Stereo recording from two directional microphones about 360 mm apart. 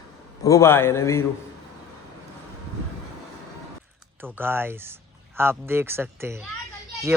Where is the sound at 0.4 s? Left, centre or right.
Centre.